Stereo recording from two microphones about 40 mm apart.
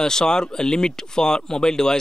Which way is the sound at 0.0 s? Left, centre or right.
Centre.